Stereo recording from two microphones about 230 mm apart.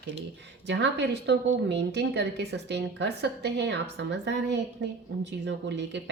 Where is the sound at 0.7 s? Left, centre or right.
Right.